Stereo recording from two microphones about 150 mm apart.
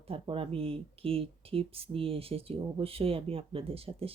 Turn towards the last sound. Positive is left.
turn(degrees=-40)  # may be behind; listen again after turning